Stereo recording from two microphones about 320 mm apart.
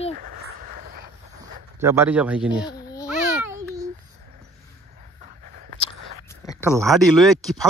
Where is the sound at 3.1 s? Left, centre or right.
Centre.